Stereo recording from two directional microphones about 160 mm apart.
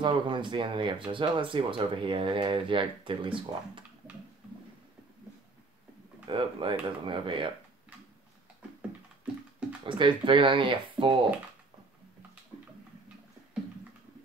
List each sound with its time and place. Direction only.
0.0 s speech: 30° right (ahead or behind)
6.2 s speech: 30° right (ahead or behind)
9.2 s music: 10° right (ahead or behind)
9.8 s speech: 30° right (ahead or behind)